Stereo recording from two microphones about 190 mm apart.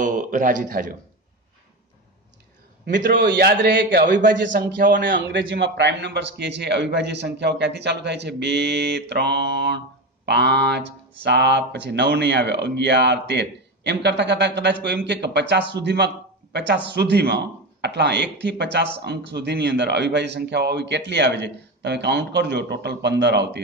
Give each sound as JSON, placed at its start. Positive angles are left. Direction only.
{"t": 0.0, "sound": "a man's voice", "side_deg": -45}
{"t": 2.8, "sound": "a man's voice", "side_deg": -70}
{"t": 4.0, "sound": "a man's voice", "side_deg": -45}
{"t": 5.3, "sound": "a man's voice", "side_deg": -80}